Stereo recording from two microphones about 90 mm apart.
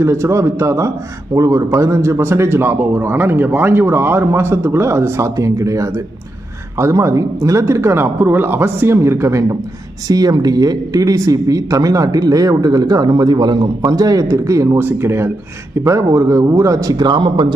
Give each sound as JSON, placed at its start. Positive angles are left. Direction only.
{"t": 0.0, "sound": "a man's voice", "side_deg": -30}
{"t": 10.1, "sound": "speech", "side_deg": -45}
{"t": 14.8, "sound": "a man's voice", "side_deg": -25}